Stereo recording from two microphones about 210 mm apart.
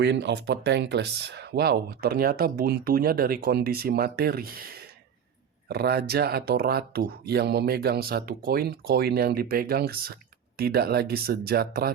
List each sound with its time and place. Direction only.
0.0 s speech: 55° right (ahead or behind)